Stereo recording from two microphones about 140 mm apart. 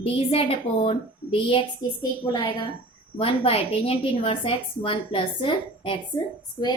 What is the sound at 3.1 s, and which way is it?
A woman's voice, 40° left (ahead or behind).